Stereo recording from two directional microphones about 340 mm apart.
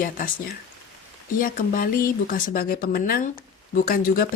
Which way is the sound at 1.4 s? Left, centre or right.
Left.